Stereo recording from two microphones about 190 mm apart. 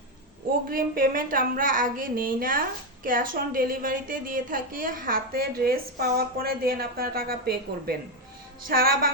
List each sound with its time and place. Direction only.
0.7 s a woman's voice: 50° right (ahead or behind)